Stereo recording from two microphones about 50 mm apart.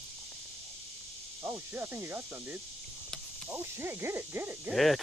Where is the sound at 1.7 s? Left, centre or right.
Right.